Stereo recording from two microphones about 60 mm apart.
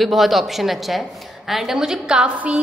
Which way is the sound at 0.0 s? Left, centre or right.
Centre.